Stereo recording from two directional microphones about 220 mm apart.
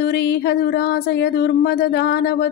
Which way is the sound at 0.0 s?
50° left (ahead or behind).